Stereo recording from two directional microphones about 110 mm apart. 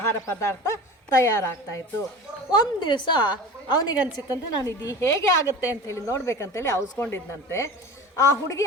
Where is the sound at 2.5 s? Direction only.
40° left (ahead or behind).